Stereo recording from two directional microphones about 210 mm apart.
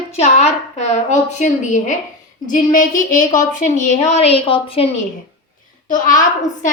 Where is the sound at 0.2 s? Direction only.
30° left (ahead or behind).